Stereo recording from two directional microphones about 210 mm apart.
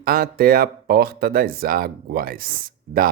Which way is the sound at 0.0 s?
45° right (ahead or behind).